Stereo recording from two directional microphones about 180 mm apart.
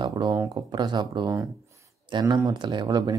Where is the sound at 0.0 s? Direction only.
25° right (ahead or behind).